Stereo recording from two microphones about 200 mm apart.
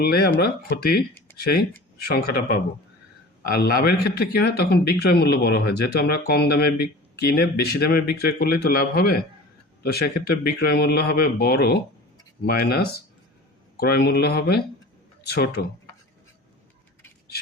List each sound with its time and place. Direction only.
0.0 s speech: 50° left (ahead or behind)